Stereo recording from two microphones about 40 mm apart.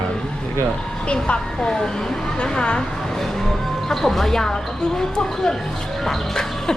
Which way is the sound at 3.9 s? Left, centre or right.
Centre.